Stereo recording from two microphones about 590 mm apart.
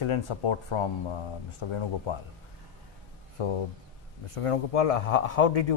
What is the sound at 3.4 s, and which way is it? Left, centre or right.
Speech, left.